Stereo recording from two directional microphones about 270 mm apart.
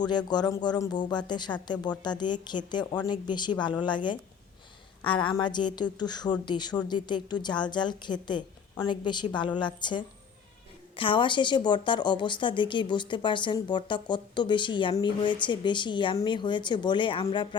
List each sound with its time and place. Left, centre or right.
0.0 s a woman's voice: centre